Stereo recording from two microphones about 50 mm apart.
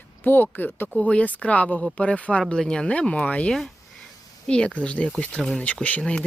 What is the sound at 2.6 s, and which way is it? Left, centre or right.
Speech, centre.